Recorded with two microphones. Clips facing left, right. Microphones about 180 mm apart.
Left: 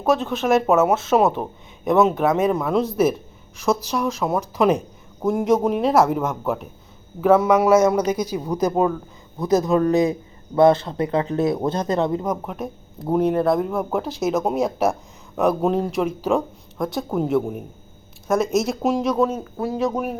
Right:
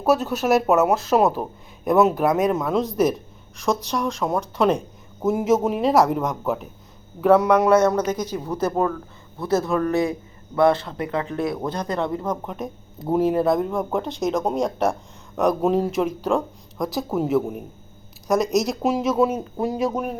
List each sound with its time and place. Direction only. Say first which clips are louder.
0.0 s a man's voice: even; 5° right (ahead or behind); by 12.3 s 20° left (ahead or behind)
12.3 s speech: left 1 dB; 5° left (ahead or behind); by 19.9 s 15° right (ahead or behind)
19.9 s speech: left 1 dB; 5° left (ahead or behind)